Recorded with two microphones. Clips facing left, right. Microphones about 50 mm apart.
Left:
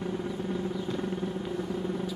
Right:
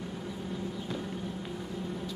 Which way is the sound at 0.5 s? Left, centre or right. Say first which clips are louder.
Left 4 dB; centre.